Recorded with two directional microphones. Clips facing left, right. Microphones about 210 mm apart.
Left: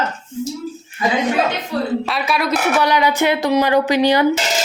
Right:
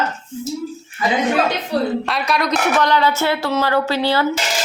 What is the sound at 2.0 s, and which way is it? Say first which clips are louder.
Speech: even; centre (ahead or behind).